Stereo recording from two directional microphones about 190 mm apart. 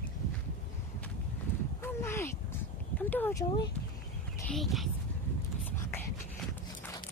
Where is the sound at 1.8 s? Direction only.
15° left (ahead or behind).